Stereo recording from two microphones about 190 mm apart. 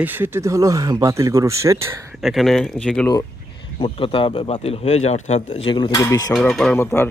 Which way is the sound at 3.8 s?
30° left (ahead or behind).